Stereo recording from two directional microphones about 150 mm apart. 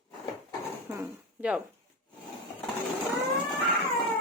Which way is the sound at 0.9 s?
15° right (ahead or behind).